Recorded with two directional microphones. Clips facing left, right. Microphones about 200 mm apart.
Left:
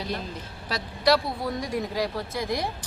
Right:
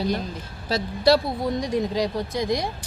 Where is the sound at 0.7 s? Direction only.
25° right (ahead or behind).